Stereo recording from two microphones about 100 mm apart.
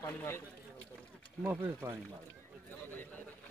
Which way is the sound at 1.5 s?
25° right (ahead or behind).